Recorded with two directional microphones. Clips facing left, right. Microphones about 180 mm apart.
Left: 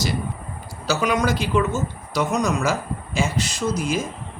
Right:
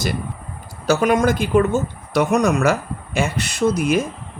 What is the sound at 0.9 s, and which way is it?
Speech, 50° right (ahead or behind).